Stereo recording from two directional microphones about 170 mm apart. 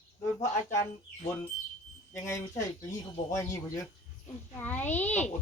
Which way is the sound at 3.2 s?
15° left (ahead or behind).